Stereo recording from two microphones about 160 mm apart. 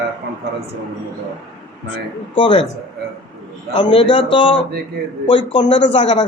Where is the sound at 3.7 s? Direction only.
35° left (ahead or behind).